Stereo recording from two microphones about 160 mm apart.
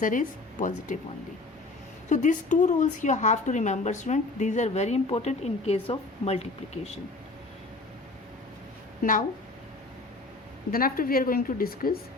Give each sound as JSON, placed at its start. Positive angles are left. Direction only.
{"t": 0.0, "sound": "a woman's voice", "side_deg": 55}
{"t": 2.0, "sound": "a woman's voice", "side_deg": 50}
{"t": 10.7, "sound": "a woman's voice", "side_deg": 65}